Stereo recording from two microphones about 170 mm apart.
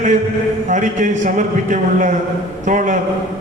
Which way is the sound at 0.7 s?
45° right (ahead or behind).